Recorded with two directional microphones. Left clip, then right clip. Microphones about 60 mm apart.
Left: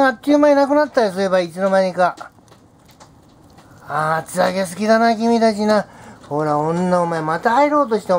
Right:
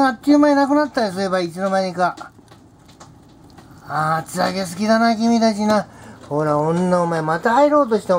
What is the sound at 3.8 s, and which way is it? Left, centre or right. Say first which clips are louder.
Speech: left 1 dB; left.